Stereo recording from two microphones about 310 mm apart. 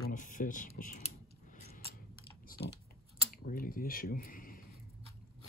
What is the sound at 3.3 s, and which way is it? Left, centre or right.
Speech, left.